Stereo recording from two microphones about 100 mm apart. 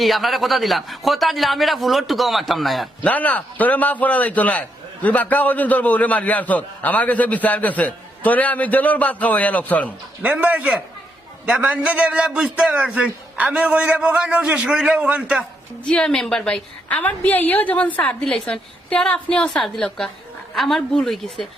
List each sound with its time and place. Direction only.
0.0 s a man's voice: centre (ahead or behind)
3.0 s a man's voice: 15° left (ahead or behind)
10.2 s a man's voice: 15° right (ahead or behind)
15.8 s a man's voice: 5° left (ahead or behind)